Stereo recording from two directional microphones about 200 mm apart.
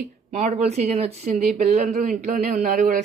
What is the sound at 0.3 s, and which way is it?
Speech, 35° right (ahead or behind).